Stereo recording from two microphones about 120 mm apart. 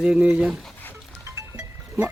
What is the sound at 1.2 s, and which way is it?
Music, 25° right (ahead or behind).